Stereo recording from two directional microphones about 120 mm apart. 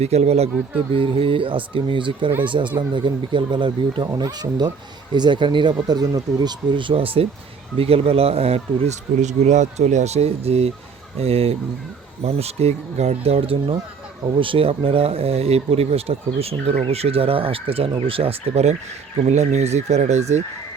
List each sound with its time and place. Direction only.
0.0 s speech: 65° right (ahead or behind)
0.9 s speech: 50° right (ahead or behind); by 20.4 s 70° right (ahead or behind)